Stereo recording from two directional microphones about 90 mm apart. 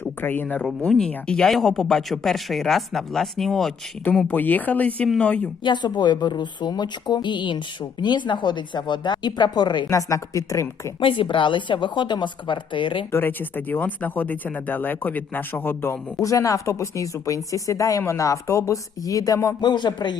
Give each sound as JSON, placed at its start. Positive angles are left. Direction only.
{"t": 0.0, "sound": "speech", "side_deg": 20}
{"t": 0.9, "sound": "speech", "side_deg": 5}
{"t": 4.3, "sound": "speech", "side_deg": 20}
{"t": 5.6, "sound": "speech", "side_deg": 60}
{"t": 9.9, "sound": "speech", "side_deg": 35}
{"t": 11.0, "sound": "a woman's voice", "side_deg": 70}
{"t": 13.1, "sound": "speech", "side_deg": 25}
{"t": 16.2, "sound": "speech", "side_deg": 35}
{"t": 19.6, "sound": "speech", "side_deg": 55}